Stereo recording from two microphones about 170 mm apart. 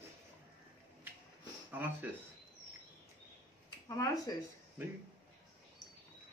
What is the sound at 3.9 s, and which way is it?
Speech, 20° left (ahead or behind).